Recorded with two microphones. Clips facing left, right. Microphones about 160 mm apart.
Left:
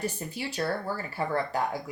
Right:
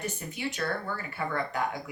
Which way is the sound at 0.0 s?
30° left (ahead or behind).